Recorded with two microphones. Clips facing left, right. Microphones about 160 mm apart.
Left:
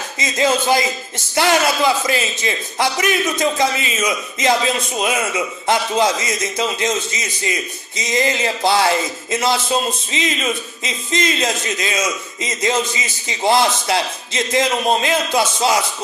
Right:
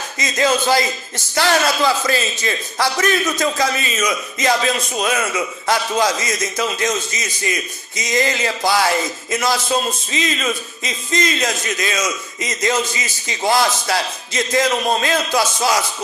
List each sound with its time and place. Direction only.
0.2 s a man's voice: 20° left (ahead or behind)